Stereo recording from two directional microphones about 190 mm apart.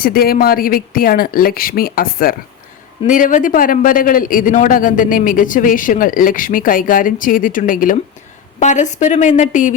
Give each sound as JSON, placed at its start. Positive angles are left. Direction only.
{"t": 0.0, "sound": "a man's voice", "side_deg": 50}